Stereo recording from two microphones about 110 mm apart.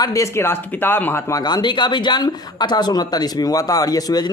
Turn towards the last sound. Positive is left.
turn(degrees=35)  # may be behind; listen again after turning